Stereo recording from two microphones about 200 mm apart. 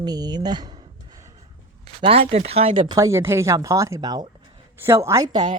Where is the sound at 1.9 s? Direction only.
30° right (ahead or behind).